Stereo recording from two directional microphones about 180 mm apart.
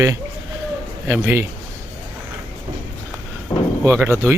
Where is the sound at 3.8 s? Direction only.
15° right (ahead or behind).